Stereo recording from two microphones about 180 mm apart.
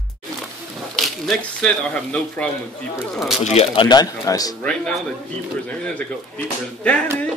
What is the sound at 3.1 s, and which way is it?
Speech, centre (ahead or behind).